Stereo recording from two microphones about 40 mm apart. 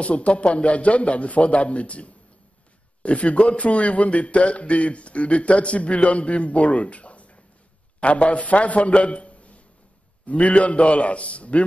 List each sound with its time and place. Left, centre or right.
0.0 s a man's voice: left